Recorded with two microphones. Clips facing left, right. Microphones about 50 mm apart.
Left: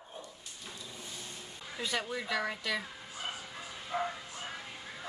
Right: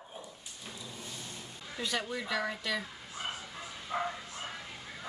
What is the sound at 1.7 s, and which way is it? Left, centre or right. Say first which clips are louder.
Speech: even; centre.